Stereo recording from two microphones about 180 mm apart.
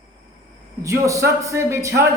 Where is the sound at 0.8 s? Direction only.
15° right (ahead or behind).